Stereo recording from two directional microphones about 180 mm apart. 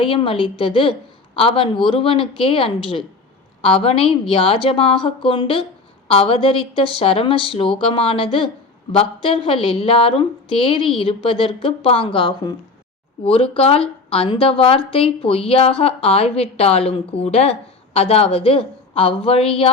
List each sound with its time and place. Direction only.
0.0 s a woman's voice: 30° left (ahead or behind)